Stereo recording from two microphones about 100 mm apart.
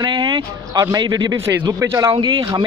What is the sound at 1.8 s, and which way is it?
Speech, 30° right (ahead or behind).